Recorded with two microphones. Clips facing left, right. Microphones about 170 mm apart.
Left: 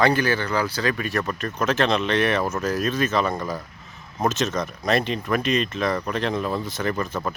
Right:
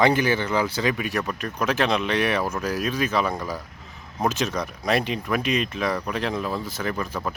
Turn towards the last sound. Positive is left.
turn(degrees=-5)  # may be behind; listen again after turning